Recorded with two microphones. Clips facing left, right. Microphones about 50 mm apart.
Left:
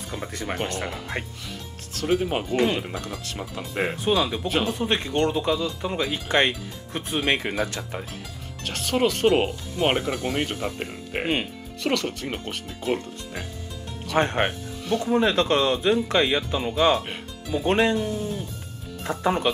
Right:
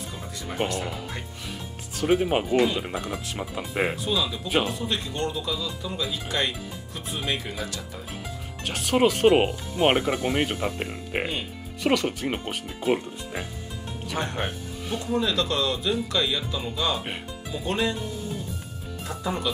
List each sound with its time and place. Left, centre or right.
0.1 s speech: left
2.0 s speech: centre
2.5 s speech: left
2.8 s speech: centre
3.9 s speech: left
4.5 s speech: centre
4.7 s speech: left
8.6 s speech: centre
14.1 s speech: left